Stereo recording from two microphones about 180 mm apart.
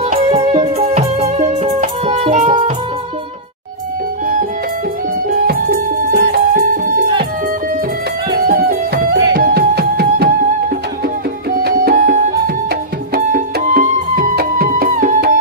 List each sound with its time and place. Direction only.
0.0 s music: 35° right (ahead or behind)
5.3 s music: 50° right (ahead or behind)
8.4 s music: 55° right (ahead or behind)
11.5 s music: 55° right (ahead or behind)